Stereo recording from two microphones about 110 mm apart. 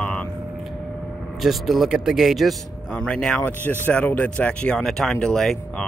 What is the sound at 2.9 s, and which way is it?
Speech, 10° left (ahead or behind).